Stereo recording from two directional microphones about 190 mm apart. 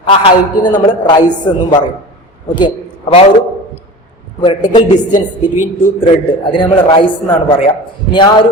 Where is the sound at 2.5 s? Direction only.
25° left (ahead or behind).